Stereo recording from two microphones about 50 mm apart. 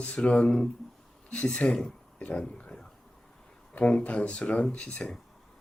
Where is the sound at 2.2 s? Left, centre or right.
Left.